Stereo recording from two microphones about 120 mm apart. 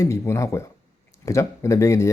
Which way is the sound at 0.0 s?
25° left (ahead or behind).